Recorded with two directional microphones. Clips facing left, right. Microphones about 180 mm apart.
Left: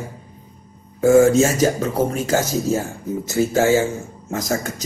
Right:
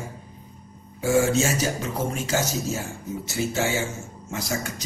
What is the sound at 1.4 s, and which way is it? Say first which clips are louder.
Speech: left 8 dB; 40° left (ahead or behind).